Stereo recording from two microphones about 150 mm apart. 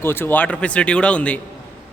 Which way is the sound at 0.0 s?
15° left (ahead or behind).